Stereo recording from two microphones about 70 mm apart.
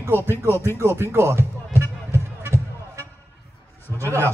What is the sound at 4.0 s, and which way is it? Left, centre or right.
Speech, right.